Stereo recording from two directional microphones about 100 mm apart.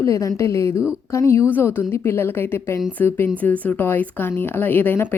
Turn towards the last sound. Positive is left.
turn(degrees=20)  # may be behind; listen again after turning